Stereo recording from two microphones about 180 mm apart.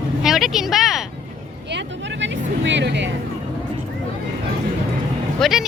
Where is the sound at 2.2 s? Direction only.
85° right.